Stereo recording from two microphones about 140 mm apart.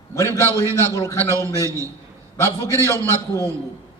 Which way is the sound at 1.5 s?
20° right (ahead or behind).